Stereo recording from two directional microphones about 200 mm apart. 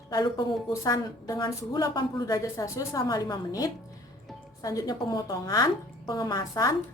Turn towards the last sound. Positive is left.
turn(degrees=15)  # may be behind; listen again after turning